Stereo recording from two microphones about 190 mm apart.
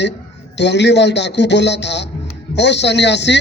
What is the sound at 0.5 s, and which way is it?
A man's voice, 65° left (ahead or behind).